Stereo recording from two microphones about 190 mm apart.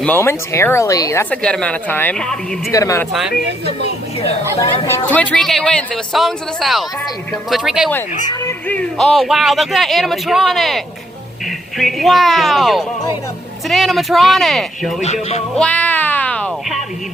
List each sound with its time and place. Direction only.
0.0 s speech: 10° left (ahead or behind)
2.7 s speech: 15° left (ahead or behind)
3.1 s speech: centre (ahead or behind)
4.6 s speech: 10° left (ahead or behind)
8.3 s speech: 10° left (ahead or behind)
15.0 s speech: 35° left (ahead or behind)
15.5 s music: 5° left (ahead or behind)